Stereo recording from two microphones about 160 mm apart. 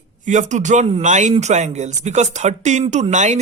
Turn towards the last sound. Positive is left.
turn(degrees=-50)  # may be behind; listen again after turning